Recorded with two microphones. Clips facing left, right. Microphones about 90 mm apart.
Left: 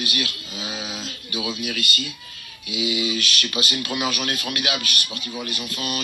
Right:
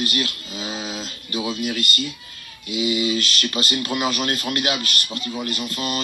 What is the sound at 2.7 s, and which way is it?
Speech, 40° right (ahead or behind).